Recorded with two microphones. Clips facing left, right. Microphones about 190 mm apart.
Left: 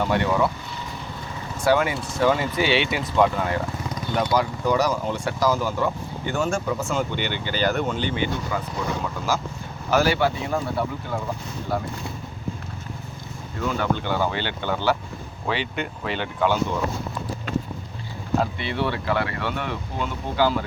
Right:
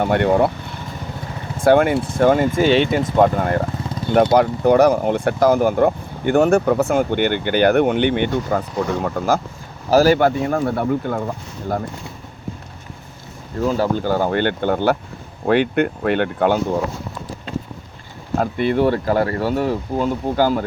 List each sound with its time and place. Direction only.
0.0 s speech: 55° right (ahead or behind)
3.8 s vehicle: 30° right (ahead or behind)
4.1 s speech: 60° right (ahead or behind)
9.9 s speech: 40° right (ahead or behind)
13.6 s speech: 35° right (ahead or behind); by 16.6 s 55° right (ahead or behind)
18.3 s speech: 50° right (ahead or behind)